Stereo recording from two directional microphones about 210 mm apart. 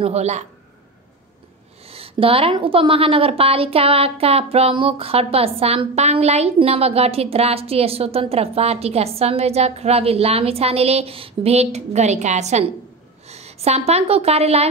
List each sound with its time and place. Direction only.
0.0 s a woman's voice: 30° right (ahead or behind)
1.9 s a woman's voice: 25° right (ahead or behind)